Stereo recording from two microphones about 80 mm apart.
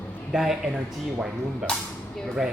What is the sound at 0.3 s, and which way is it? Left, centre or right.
A man's voice, centre.